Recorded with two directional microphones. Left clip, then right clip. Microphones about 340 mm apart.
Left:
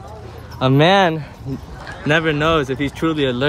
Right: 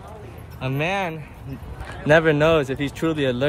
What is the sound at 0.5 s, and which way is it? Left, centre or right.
Speech, centre.